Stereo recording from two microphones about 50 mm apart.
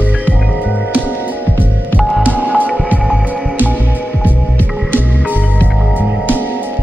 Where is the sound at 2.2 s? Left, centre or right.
Right.